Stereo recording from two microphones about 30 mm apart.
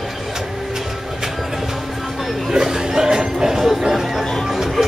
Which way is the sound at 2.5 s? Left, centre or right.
Centre.